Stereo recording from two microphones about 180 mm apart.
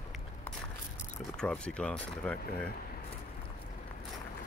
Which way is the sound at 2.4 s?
55° left (ahead or behind).